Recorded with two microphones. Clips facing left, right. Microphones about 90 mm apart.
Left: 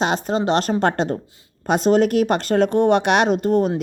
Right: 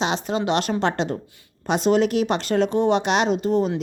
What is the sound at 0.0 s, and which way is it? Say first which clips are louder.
A woman's voice: left 3 dB; 45° left (ahead or behind).